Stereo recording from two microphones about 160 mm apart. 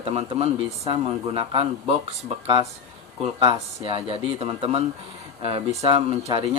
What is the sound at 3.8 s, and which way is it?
Speech, 35° right (ahead or behind).